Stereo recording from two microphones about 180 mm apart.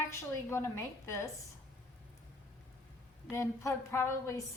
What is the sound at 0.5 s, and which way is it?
Speech, 15° left (ahead or behind).